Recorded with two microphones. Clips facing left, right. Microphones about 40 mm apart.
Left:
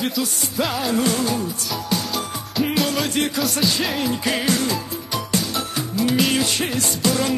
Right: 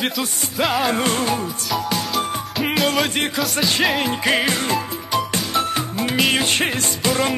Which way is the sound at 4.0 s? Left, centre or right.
Right.